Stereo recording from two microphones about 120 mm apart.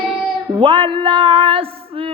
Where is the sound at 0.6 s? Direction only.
45° right (ahead or behind).